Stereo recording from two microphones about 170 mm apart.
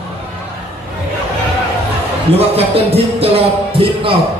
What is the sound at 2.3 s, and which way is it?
A man's voice, 35° right (ahead or behind).